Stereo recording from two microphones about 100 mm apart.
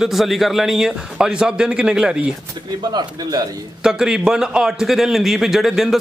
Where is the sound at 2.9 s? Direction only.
45° right (ahead or behind).